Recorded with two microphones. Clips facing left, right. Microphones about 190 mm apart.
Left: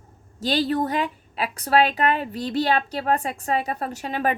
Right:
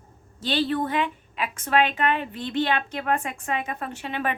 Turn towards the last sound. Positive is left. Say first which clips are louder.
# left 4 dB
turn(degrees=40)  # may be behind; listen again after turning